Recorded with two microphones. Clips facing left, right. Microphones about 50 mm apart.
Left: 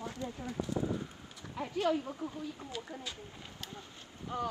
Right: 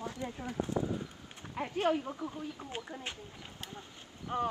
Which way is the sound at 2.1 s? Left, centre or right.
Centre.